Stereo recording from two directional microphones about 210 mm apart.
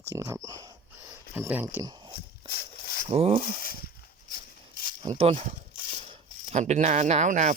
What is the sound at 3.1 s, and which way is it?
Speech, 30° right (ahead or behind).